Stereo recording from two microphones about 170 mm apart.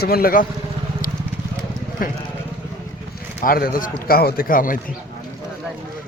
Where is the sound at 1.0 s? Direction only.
55° left (ahead or behind).